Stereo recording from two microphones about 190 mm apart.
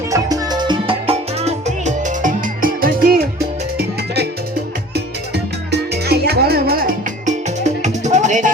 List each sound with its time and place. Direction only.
0.1 s music: 20° right (ahead or behind); by 8.5 s 40° right (ahead or behind)